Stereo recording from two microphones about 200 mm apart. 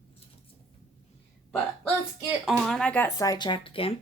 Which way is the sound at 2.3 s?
5° right (ahead or behind).